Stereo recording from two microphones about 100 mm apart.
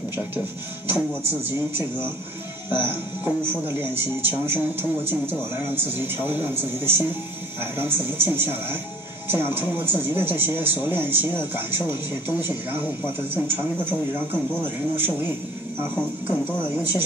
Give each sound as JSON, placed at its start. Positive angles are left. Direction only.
{"t": 0.8, "sound": "a man's voice", "side_deg": -20}